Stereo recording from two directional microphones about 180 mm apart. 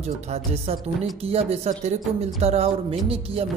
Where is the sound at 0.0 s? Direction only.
35° right (ahead or behind).